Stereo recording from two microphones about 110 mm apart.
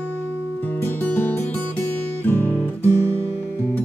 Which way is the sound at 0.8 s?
15° left (ahead or behind).